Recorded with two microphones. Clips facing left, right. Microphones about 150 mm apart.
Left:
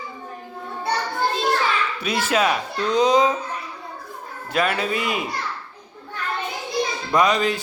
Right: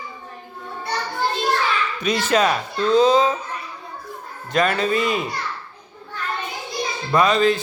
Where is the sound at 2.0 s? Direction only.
10° left (ahead or behind).